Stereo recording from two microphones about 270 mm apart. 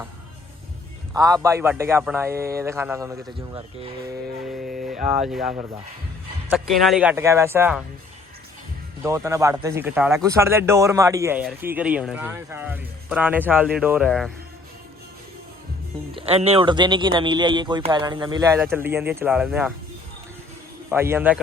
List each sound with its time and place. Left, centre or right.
1.1 s speech: centre
3.5 s speech: right
4.8 s speech: centre
9.0 s speech: centre
16.1 s speech: right; by 19.7 s centre
20.9 s speech: centre